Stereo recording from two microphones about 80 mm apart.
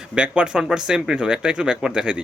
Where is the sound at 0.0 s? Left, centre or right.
Centre.